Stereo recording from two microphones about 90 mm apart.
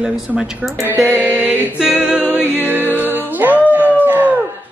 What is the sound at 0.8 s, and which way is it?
Mantra, 20° right (ahead or behind).